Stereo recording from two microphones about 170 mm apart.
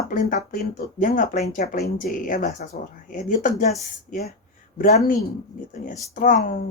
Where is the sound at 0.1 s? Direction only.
50° left (ahead or behind).